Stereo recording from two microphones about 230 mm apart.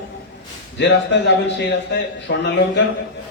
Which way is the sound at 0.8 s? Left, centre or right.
Left.